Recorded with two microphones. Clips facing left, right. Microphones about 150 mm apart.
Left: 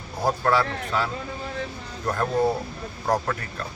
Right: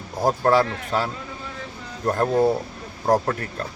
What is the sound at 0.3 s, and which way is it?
A man's voice, 40° right (ahead or behind).